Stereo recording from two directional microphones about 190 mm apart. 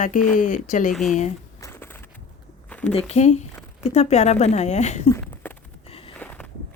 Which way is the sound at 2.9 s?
35° left (ahead or behind).